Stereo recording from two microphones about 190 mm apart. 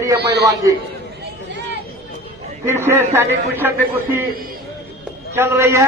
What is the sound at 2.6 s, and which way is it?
A man's voice, 10° right (ahead or behind).